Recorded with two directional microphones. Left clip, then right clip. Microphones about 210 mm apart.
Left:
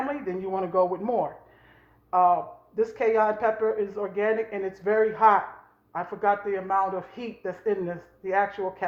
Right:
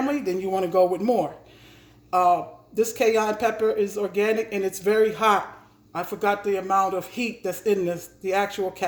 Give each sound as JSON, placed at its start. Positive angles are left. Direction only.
{"t": 0.0, "sound": "a man's voice", "side_deg": -55}